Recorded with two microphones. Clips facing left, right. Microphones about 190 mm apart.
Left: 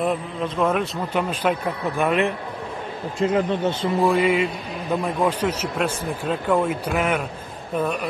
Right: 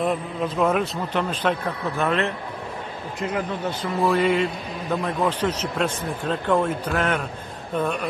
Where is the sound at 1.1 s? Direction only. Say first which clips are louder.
Left 1 dB; 10° left (ahead or behind).